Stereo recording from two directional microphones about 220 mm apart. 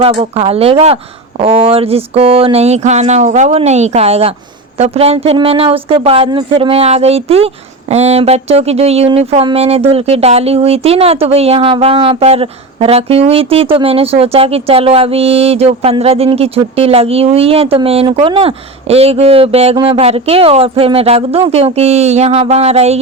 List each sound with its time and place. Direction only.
0.0 s a woman's voice: 25° right (ahead or behind)